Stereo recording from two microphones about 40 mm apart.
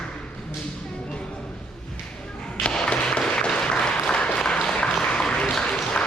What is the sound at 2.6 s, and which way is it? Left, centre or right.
Applause, left.